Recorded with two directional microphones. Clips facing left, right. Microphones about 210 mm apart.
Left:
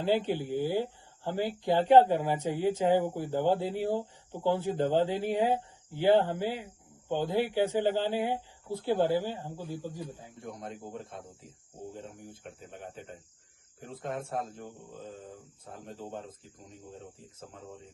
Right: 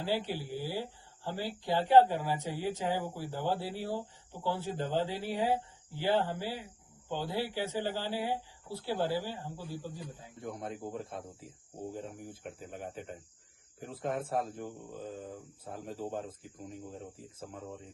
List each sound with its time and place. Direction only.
0.0 s speech: 20° left (ahead or behind)
10.3 s speech: centre (ahead or behind)
12.4 s speech: centre (ahead or behind)